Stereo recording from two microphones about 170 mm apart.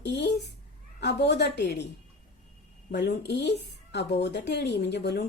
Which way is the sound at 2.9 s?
85° left.